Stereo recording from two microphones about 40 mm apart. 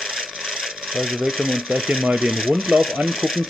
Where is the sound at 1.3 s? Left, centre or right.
Centre.